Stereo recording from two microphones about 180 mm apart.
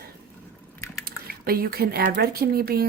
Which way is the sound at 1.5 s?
55° right (ahead or behind).